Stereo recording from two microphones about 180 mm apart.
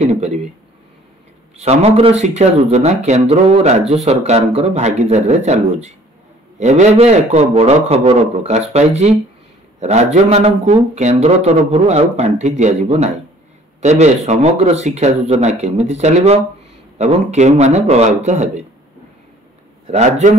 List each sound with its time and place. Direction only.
0.0 s speech: 40° right (ahead or behind)
1.6 s speech: 35° right (ahead or behind)
19.9 s speech: 40° right (ahead or behind)